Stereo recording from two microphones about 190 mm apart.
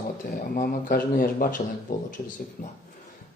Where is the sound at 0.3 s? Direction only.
50° left (ahead or behind).